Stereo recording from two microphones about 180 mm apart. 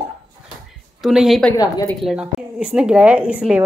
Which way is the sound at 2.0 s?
5° right (ahead or behind).